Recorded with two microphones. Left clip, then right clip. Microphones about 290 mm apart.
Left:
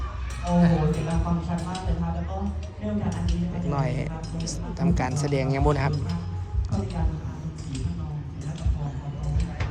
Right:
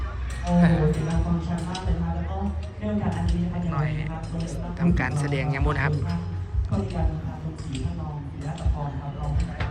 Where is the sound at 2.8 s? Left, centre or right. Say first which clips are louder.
Right 2 dB; centre.